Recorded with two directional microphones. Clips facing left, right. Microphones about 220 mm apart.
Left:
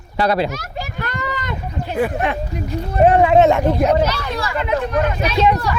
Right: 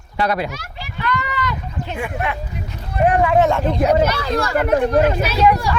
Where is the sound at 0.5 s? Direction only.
45° left (ahead or behind).